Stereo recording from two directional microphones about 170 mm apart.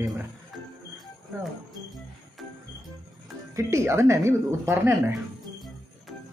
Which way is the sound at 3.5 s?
15° right (ahead or behind).